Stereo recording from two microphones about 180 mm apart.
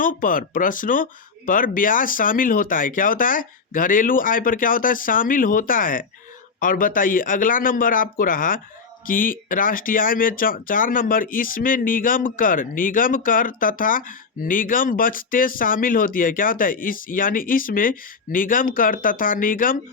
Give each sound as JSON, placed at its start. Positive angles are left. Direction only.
{"t": 0.0, "sound": "speech", "side_deg": 50}